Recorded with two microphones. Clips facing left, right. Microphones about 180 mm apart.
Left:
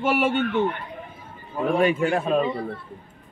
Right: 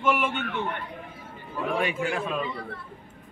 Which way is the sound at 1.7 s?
40° left (ahead or behind).